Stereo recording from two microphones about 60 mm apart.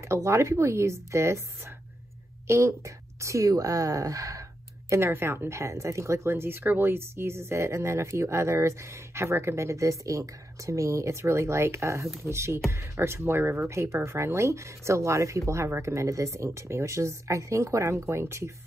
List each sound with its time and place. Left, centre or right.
0.0 s a woman's voice: right
2.4 s a woman's voice: right